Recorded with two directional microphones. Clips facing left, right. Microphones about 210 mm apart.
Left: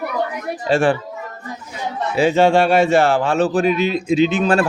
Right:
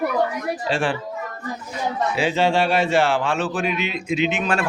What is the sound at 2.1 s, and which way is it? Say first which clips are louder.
Speech: left 7 dB; 45° left (ahead or behind).